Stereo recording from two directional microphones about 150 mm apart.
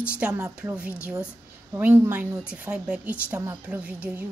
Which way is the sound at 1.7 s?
15° right (ahead or behind).